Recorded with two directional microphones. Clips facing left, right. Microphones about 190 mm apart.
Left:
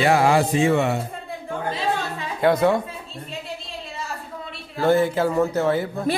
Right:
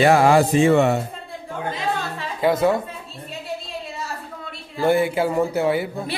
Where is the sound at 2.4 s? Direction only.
Centre (ahead or behind).